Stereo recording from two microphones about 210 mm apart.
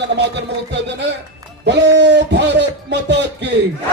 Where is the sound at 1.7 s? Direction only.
55° right (ahead or behind).